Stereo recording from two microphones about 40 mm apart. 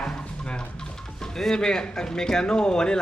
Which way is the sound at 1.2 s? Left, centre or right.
Centre.